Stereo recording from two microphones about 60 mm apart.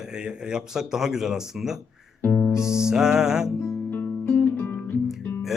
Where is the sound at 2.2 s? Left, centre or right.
Left.